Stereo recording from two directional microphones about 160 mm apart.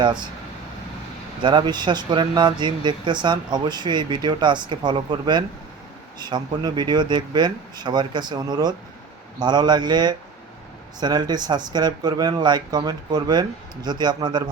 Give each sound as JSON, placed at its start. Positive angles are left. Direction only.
{"t": 0.0, "sound": "speech", "side_deg": -30}
{"t": 1.4, "sound": "speech", "side_deg": -30}